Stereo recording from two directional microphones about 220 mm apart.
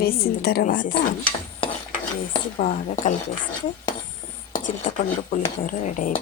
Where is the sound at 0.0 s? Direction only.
45° left (ahead or behind).